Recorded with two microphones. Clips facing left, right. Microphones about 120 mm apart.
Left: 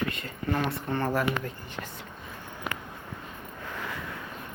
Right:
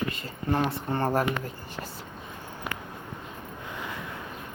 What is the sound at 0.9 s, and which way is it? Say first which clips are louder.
Speech: right 2 dB; 40° right (ahead or behind).